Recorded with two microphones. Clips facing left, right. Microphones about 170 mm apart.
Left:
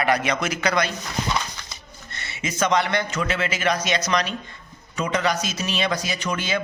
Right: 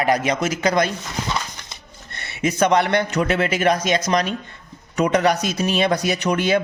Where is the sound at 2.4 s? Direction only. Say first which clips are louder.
Right 5 dB; 60° right (ahead or behind).